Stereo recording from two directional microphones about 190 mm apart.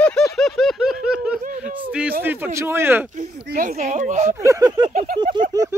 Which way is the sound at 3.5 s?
40° right (ahead or behind).